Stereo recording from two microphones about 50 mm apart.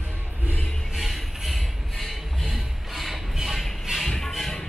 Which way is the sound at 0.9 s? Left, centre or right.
Centre.